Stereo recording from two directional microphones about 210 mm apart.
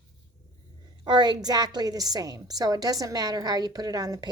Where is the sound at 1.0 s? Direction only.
20° right (ahead or behind).